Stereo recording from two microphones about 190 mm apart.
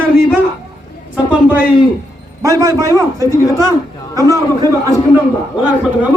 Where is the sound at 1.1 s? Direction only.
5° right (ahead or behind).